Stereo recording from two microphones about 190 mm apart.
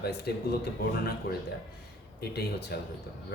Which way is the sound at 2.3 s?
60° left (ahead or behind).